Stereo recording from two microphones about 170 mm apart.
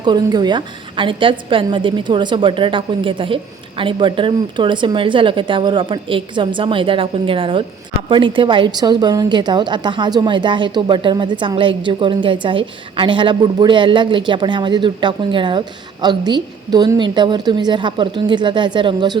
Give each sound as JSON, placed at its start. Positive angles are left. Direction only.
{"t": 0.0, "sound": "a woman's voice", "side_deg": -25}